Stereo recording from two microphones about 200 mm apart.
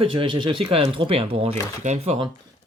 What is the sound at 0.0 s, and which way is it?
Speech, 25° right (ahead or behind).